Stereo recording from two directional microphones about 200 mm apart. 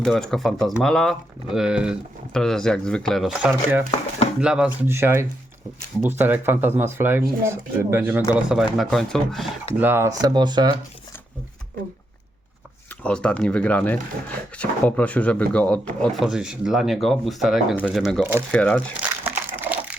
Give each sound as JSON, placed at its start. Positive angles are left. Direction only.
{"t": 0.0, "sound": "speech", "side_deg": 0}
{"t": 9.8, "sound": "speech", "side_deg": -10}
{"t": 13.0, "sound": "speech", "side_deg": 5}
{"t": 19.0, "sound": "crumpling", "side_deg": -10}